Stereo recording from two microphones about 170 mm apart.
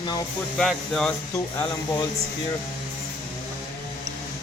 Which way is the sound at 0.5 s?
Centre (ahead or behind).